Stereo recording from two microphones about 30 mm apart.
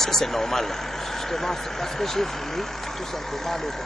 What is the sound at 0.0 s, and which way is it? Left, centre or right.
Speech, centre.